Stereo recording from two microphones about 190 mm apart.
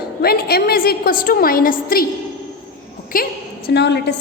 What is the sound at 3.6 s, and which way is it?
Speech, 65° left (ahead or behind).